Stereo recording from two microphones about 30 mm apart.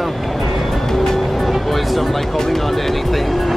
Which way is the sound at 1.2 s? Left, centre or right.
Centre.